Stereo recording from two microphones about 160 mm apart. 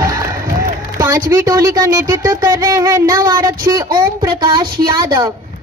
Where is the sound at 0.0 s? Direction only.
20° right (ahead or behind).